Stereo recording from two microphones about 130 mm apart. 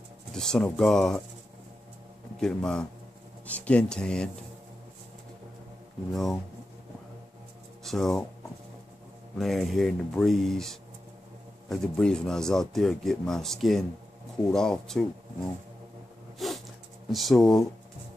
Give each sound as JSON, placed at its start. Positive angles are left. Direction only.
{"t": 0.3, "sound": "a man's voice", "side_deg": 5}
{"t": 2.4, "sound": "a man's voice", "side_deg": 5}
{"t": 6.1, "sound": "a man's voice", "side_deg": 0}
{"t": 7.8, "sound": "speech", "side_deg": 5}
{"t": 9.4, "sound": "a man's voice", "side_deg": 0}
{"t": 16.3, "sound": "a sound", "side_deg": 0}
{"t": 17.1, "sound": "a man's voice", "side_deg": 0}